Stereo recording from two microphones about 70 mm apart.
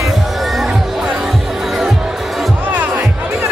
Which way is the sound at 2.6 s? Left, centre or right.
Right.